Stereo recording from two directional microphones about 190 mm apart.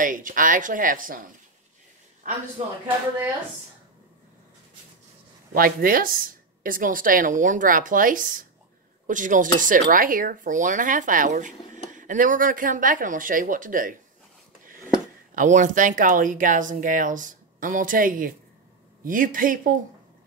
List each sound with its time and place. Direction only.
0.0 s a man's voice: 45° right (ahead or behind)
5.5 s speech: 50° right (ahead or behind)
15.3 s speech: 40° right (ahead or behind)